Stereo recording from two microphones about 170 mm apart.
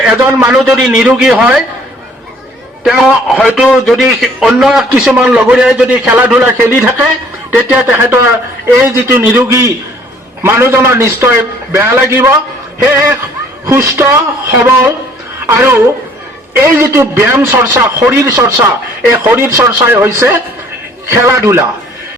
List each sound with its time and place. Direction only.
0.0 s a man's voice: 10° right (ahead or behind)
2.8 s a man's voice: centre (ahead or behind); by 21.7 s 15° right (ahead or behind)